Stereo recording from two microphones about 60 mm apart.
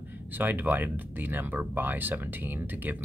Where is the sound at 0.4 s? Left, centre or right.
Right.